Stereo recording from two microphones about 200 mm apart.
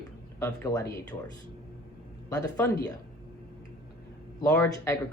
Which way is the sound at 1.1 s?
25° left (ahead or behind).